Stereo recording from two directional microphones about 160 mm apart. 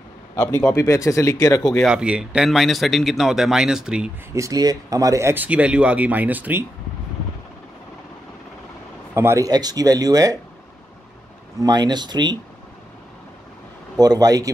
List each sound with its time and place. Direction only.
0.4 s speech: 15° left (ahead or behind)
1.8 s speech: 5° right (ahead or behind)
4.3 s speech: 20° right (ahead or behind)
9.1 s speech: 15° right (ahead or behind)
11.6 s speech: 25° right (ahead or behind)
13.9 s speech: 25° right (ahead or behind)